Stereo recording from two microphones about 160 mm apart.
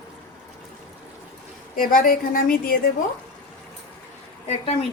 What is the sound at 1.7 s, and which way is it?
A woman's voice, 60° left (ahead or behind).